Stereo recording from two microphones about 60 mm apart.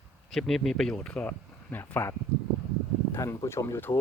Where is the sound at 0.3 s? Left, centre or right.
Centre; by 1.8 s left.